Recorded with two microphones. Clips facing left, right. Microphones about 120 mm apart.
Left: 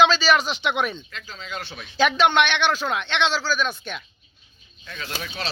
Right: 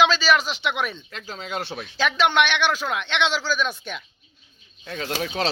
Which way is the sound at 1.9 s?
Centre (ahead or behind).